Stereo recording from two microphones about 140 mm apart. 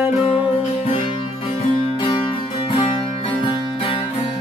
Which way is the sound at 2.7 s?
45° left (ahead or behind).